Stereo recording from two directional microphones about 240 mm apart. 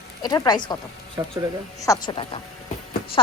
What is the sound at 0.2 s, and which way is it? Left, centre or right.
Speech, centre.